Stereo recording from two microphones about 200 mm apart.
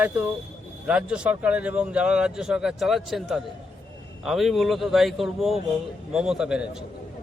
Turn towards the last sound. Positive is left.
turn(degrees=-5)  # may be behind; listen again after turning